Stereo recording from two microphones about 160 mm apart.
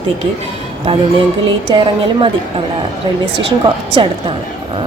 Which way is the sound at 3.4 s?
35° right (ahead or behind).